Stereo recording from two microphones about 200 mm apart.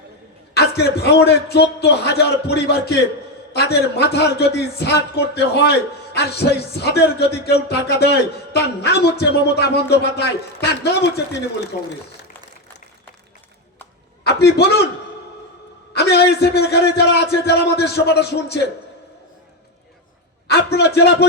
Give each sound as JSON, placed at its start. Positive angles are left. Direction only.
{"t": 0.5, "sound": "speech", "side_deg": 55}
{"t": 14.3, "sound": "a man's voice", "side_deg": 55}
{"t": 15.9, "sound": "speech", "side_deg": 55}
{"t": 20.5, "sound": "a man's voice", "side_deg": 55}